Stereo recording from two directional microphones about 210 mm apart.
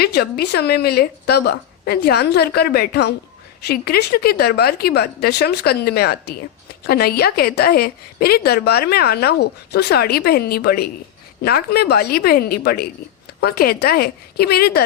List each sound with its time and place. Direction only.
0.0 s a woman's voice: 50° left (ahead or behind)